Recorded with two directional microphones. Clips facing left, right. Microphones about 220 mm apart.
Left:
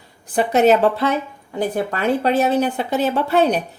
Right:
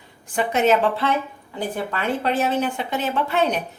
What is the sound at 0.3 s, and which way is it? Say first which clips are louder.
Speech: left 4 dB; 35° left (ahead or behind).